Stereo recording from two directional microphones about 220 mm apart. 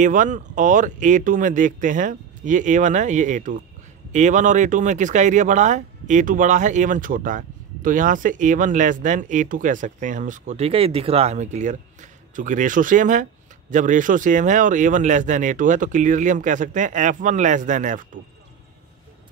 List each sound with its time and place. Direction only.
0.0 s speech: 35° right (ahead or behind)